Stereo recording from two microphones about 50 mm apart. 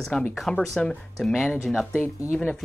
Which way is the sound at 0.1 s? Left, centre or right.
Left.